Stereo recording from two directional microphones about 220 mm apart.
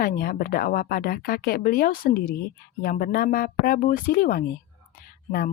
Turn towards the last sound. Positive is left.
turn(degrees=45)  # may be behind; listen again after turning